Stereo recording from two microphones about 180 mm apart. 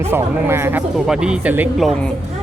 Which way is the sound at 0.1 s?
15° right (ahead or behind).